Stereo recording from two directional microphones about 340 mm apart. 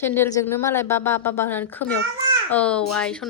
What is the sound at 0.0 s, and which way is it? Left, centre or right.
Speech, centre.